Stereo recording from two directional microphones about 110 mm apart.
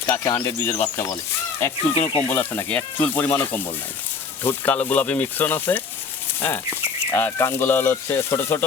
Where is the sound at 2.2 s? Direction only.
15° left (ahead or behind).